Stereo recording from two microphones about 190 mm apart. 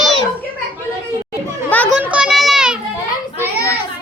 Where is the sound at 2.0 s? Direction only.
5° right (ahead or behind).